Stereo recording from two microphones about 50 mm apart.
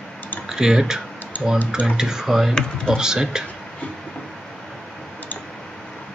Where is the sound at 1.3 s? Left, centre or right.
Left.